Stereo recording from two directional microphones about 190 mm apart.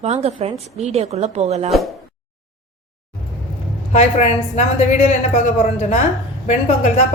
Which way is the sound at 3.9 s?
35° left (ahead or behind).